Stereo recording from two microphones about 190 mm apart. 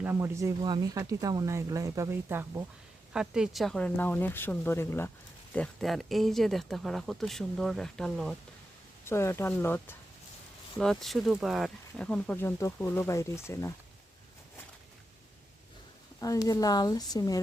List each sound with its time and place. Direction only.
0.0 s speech: 10° right (ahead or behind)
3.1 s speech: 5° right (ahead or behind)
5.5 s speech: centre (ahead or behind)
9.0 s speech: 15° left (ahead or behind)
16.2 s speech: 20° left (ahead or behind)